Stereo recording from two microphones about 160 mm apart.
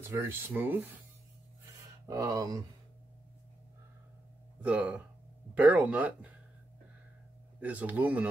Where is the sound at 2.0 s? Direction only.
20° right (ahead or behind).